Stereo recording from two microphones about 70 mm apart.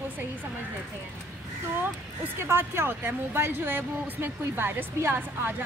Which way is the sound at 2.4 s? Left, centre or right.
Right.